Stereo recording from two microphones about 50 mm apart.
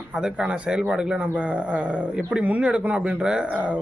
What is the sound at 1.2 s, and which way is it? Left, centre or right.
Speech, right.